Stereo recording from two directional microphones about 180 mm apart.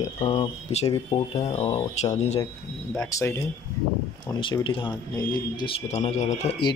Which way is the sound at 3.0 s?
15° left (ahead or behind).